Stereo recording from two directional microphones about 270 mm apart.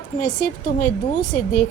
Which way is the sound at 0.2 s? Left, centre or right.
Left.